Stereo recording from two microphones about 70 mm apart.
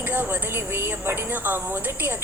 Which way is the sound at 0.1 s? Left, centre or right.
Right.